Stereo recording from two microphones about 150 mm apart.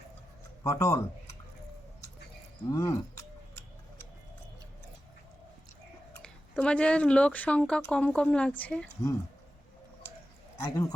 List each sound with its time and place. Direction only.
0.6 s speech: 20° left (ahead or behind)
2.6 s speech: 25° left (ahead or behind)
6.1 s speech: 5° left (ahead or behind)
10.6 s speech: 20° left (ahead or behind)